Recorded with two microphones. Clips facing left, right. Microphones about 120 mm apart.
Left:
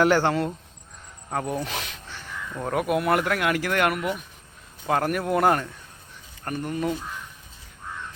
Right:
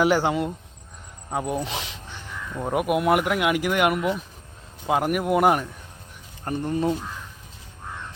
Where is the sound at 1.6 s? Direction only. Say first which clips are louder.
Right 1 dB; 25° right (ahead or behind).